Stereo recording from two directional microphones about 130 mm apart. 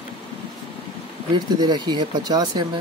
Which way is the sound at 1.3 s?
35° right (ahead or behind).